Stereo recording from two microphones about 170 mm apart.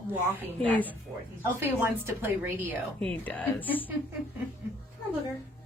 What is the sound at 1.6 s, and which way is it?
Speech, 10° right (ahead or behind).